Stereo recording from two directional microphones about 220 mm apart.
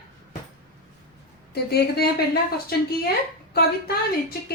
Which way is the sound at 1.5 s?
45° left (ahead or behind).